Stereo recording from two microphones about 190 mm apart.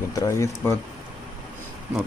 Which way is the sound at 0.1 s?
15° left (ahead or behind).